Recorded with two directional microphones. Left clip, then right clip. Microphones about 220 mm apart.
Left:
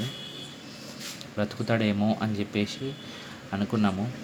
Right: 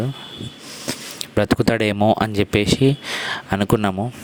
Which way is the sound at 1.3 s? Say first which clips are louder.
Right 11 dB; 45° right (ahead or behind).